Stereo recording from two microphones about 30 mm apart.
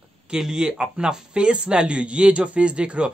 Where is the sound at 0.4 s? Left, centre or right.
Right.